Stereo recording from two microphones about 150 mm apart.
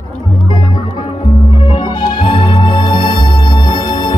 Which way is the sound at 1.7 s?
30° left (ahead or behind).